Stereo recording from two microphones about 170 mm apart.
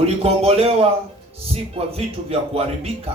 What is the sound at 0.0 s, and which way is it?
A man's voice, 35° right (ahead or behind).